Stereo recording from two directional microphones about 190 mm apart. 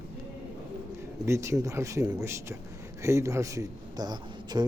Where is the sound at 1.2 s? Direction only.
15° right (ahead or behind).